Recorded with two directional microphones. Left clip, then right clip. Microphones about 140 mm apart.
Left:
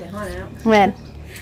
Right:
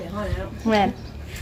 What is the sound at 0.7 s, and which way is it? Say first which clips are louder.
Speech: left 6 dB; 40° left (ahead or behind).